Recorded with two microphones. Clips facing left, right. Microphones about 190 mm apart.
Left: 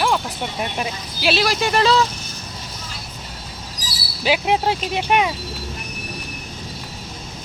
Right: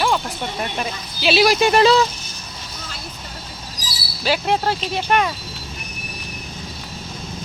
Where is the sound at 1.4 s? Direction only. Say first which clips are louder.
Right 7 dB; 15° right (ahead or behind).